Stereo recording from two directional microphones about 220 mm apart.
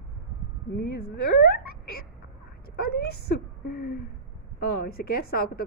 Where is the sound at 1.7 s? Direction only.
45° left (ahead or behind).